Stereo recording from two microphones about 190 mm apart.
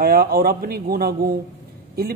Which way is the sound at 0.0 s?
50° right (ahead or behind).